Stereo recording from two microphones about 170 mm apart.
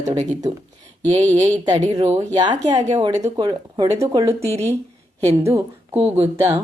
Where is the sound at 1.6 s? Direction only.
25° right (ahead or behind).